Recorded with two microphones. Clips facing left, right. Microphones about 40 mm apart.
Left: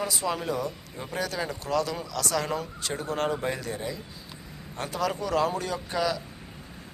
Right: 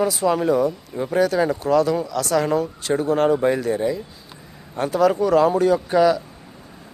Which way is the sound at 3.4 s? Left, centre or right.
Centre.